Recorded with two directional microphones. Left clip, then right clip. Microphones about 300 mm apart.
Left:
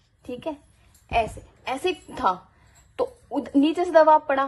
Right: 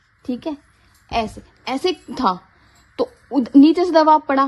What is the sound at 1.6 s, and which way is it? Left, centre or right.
Speech, right.